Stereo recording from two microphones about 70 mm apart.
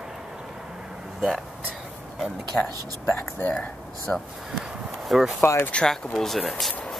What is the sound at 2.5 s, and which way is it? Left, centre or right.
Speech, centre.